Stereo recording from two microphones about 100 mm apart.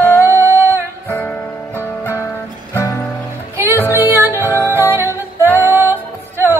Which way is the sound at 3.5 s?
20° right (ahead or behind).